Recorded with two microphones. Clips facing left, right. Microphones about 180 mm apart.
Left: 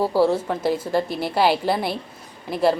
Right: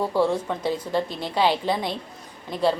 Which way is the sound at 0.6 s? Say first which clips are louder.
Left 3 dB; 10° left (ahead or behind).